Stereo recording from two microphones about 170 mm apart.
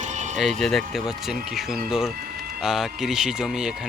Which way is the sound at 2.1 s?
65° right (ahead or behind).